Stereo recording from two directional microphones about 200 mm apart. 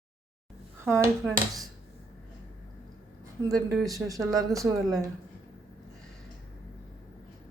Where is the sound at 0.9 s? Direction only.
10° right (ahead or behind).